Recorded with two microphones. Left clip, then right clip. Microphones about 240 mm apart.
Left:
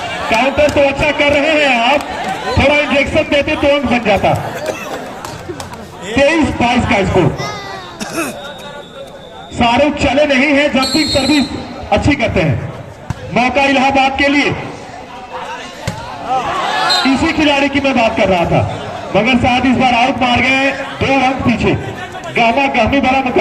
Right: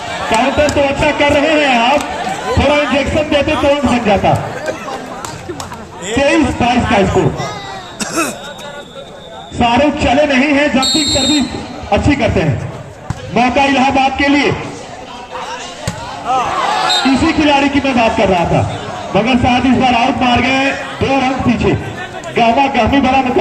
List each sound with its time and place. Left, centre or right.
0.3 s speech: left
6.1 s speech: left
7.9 s a sound: centre
9.6 s speech: left
17.1 s a man's voice: left